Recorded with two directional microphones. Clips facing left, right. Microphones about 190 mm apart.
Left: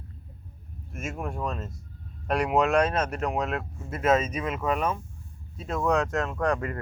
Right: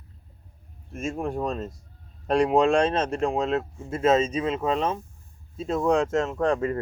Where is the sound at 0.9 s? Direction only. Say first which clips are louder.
Right 5 dB; 30° right (ahead or behind).